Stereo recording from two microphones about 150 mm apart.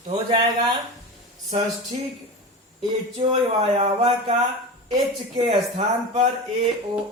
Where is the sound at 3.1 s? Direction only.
45° right (ahead or behind).